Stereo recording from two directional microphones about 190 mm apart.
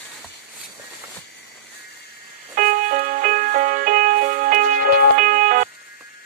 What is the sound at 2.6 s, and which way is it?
Music, 45° right (ahead or behind).